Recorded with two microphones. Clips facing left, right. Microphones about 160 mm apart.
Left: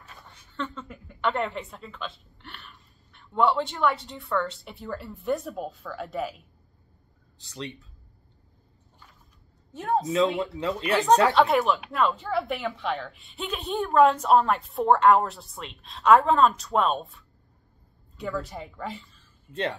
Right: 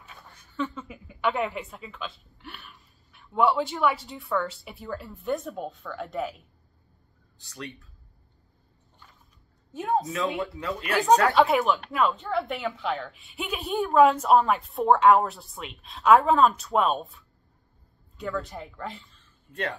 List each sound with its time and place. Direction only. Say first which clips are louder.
0.0 s a woman's voice: even; centre (ahead or behind)
7.3 s speech: left 3 dB; 25° left (ahead or behind)
9.7 s a woman's voice: even; centre (ahead or behind)
10.6 s speech: left 7 dB; 25° left (ahead or behind)
11.3 s a woman's voice: even; centre (ahead or behind)